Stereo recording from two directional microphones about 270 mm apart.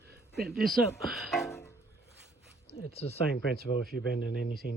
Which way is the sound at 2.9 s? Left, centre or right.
Left.